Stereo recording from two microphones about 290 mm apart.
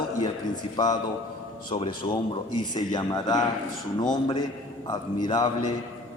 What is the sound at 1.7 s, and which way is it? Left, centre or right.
Speech, centre.